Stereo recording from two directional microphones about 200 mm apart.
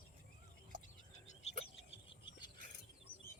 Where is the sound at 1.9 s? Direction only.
25° left (ahead or behind).